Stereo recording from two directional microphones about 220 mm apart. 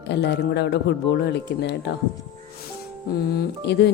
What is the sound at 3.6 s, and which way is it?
Speech, 50° left (ahead or behind).